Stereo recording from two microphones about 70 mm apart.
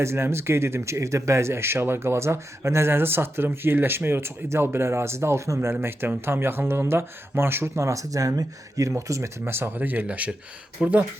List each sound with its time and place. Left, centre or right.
0.0 s speech: right
9.4 s speech: right